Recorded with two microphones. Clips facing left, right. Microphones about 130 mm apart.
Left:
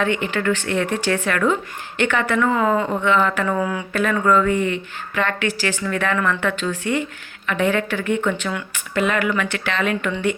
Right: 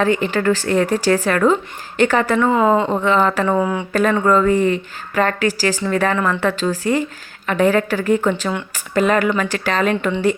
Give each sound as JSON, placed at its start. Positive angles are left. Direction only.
{"t": 0.0, "sound": "a woman's voice", "side_deg": -35}